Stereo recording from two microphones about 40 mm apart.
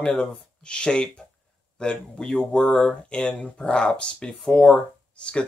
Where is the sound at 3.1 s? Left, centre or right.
Left.